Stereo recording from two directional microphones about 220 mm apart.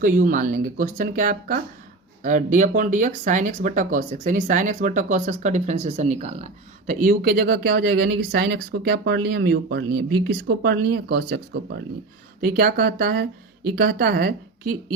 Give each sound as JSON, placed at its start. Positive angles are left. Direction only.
{"t": 0.0, "sound": "speech", "side_deg": -35}